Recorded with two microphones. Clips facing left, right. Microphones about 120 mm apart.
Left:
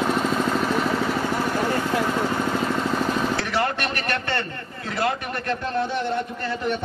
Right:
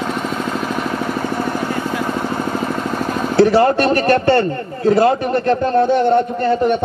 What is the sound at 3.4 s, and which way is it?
A man's voice, 35° right (ahead or behind).